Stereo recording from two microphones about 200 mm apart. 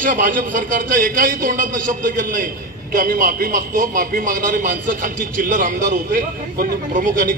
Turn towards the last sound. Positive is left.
turn(degrees=-45)  # may be behind; listen again after turning